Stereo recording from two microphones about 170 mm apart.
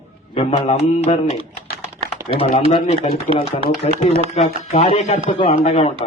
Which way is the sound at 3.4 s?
35° left (ahead or behind).